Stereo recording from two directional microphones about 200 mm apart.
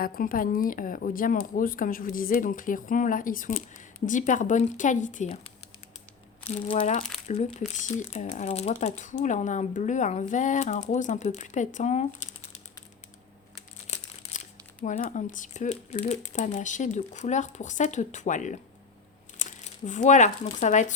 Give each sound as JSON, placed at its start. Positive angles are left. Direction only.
{"t": 0.0, "sound": "speech", "side_deg": 45}
{"t": 6.5, "sound": "speech", "side_deg": 35}
{"t": 13.8, "sound": "crumpling", "side_deg": 35}
{"t": 14.8, "sound": "speech", "side_deg": 40}